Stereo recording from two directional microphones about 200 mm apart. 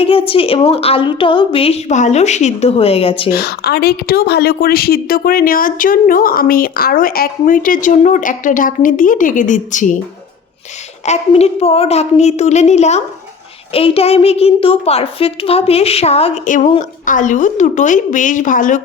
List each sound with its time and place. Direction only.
0.0 s a woman's voice: 25° left (ahead or behind)
3.3 s a woman's voice: 55° left (ahead or behind)
11.0 s a woman's voice: 35° left (ahead or behind)